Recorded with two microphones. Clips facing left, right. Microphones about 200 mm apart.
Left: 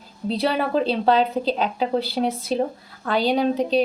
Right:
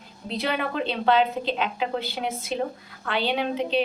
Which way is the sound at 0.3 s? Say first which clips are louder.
Left 5 dB; 35° left (ahead or behind).